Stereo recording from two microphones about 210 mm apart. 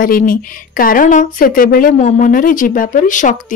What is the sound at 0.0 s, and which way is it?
Speech, 40° left (ahead or behind).